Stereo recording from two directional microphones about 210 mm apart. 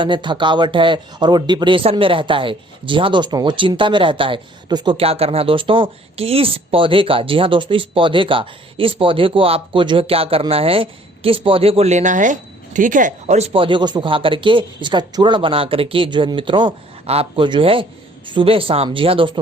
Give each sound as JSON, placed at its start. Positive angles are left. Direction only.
{"t": 0.0, "sound": "speech", "side_deg": -20}